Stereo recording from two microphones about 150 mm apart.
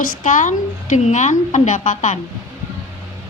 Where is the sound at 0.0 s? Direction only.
60° left (ahead or behind).